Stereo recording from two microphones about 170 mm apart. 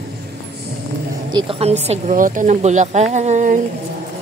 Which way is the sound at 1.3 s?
30° right (ahead or behind).